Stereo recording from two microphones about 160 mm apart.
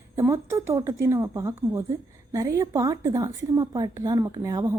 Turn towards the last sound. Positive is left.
turn(degrees=-25)  # may be behind; listen again after turning